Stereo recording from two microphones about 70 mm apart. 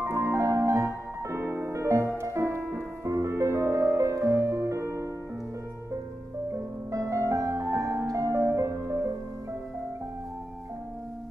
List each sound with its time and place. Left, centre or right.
0.0 s music: right
6.9 s music: right